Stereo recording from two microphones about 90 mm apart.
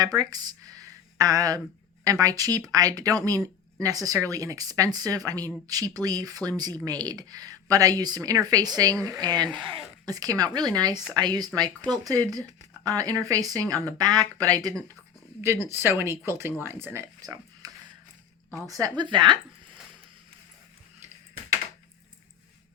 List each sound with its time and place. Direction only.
0.0 s speech: 45° right (ahead or behind)
15.4 s speech: 30° right (ahead or behind)
17.2 s a sound: 40° right (ahead or behind)
18.9 s speech: 60° right (ahead or behind)